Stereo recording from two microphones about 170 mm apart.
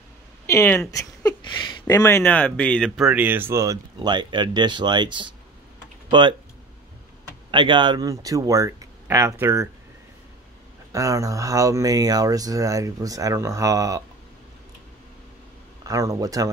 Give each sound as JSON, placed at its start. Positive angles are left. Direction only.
{"t": 0.5, "sound": "a sound", "side_deg": 15}
{"t": 1.9, "sound": "speech", "side_deg": 15}
{"t": 7.5, "sound": "speech", "side_deg": -30}
{"t": 10.9, "sound": "speech", "side_deg": -20}
{"t": 15.8, "sound": "speech", "side_deg": -20}